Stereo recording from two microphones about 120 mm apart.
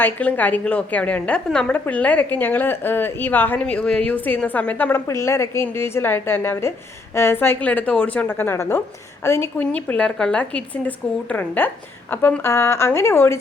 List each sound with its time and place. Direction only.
0.0 s a woman's voice: 15° left (ahead or behind)